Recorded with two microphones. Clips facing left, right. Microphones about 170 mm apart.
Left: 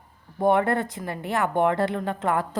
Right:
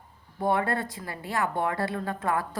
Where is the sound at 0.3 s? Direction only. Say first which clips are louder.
Left 5 dB; 20° left (ahead or behind).